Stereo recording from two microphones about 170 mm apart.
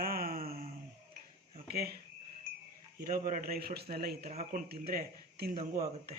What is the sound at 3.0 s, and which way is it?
Speech, 60° right (ahead or behind).